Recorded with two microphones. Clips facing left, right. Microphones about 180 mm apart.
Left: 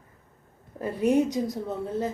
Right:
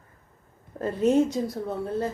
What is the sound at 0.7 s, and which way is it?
A woman's voice, 10° left (ahead or behind).